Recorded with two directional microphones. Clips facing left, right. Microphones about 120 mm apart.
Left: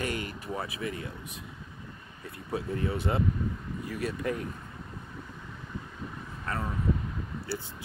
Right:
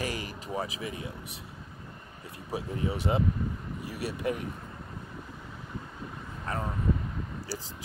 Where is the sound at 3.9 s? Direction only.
10° right (ahead or behind).